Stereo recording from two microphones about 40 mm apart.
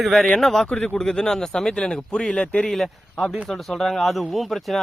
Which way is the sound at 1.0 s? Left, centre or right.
Centre.